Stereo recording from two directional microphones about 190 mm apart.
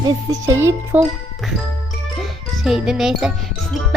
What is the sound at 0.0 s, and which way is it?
Music, 20° right (ahead or behind).